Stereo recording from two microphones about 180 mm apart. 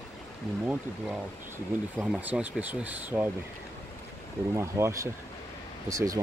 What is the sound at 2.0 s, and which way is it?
Speech, 5° right (ahead or behind).